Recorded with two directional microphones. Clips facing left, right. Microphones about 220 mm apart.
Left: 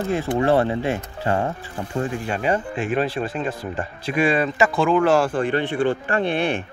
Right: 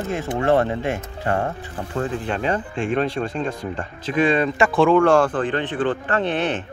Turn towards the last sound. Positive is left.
turn(degrees=10)  # may be behind; listen again after turning